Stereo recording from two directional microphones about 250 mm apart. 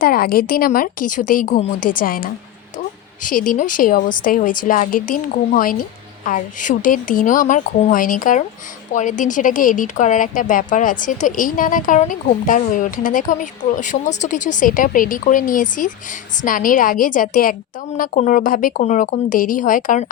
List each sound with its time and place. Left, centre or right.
0.0 s speech: left